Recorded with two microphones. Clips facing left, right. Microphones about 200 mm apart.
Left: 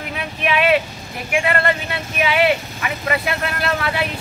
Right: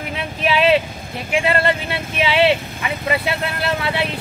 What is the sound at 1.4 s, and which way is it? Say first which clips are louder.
Speech: right 2 dB; 25° right (ahead or behind).